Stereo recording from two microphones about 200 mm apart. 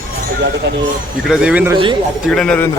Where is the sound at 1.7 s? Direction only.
25° right (ahead or behind).